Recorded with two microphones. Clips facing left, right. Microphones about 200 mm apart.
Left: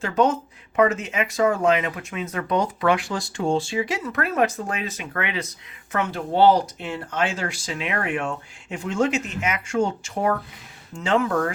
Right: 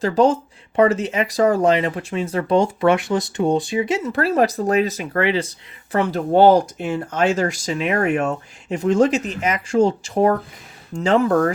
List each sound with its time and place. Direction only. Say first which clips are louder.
0.0 s speech: right 5 dB; 35° right (ahead or behind)